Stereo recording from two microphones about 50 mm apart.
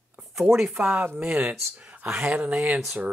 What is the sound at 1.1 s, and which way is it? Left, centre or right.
Speech, right.